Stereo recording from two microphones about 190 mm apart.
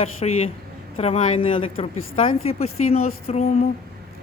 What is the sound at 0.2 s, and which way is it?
Speech, 30° left (ahead or behind).